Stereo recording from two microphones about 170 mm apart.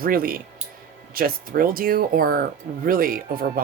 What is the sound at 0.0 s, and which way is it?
Speech, 55° right (ahead or behind).